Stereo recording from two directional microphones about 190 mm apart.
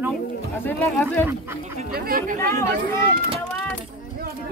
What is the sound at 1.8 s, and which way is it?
Speech, 50° right (ahead or behind).